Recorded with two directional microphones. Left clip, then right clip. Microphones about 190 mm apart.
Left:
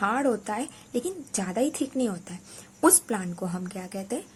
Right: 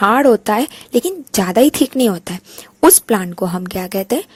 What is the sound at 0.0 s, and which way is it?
A woman's voice, 50° right (ahead or behind).